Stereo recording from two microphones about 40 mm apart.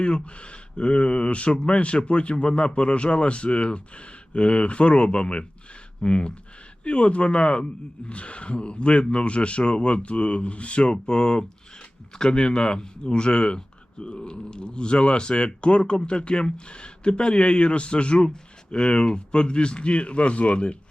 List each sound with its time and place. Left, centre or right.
0.0 s speech: left